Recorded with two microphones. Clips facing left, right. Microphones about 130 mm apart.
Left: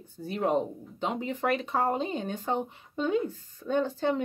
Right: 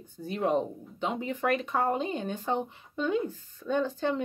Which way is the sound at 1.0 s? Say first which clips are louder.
Even; 35° left (ahead or behind).